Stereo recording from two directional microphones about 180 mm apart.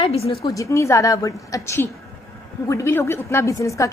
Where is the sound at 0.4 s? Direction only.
20° left (ahead or behind).